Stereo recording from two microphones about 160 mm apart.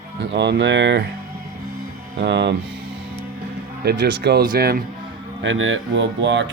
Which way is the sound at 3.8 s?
90° right.